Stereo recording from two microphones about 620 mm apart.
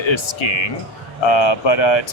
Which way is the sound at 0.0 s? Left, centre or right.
Left.